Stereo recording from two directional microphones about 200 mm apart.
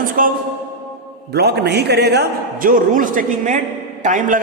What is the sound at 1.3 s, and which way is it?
A man's voice, 55° right (ahead or behind).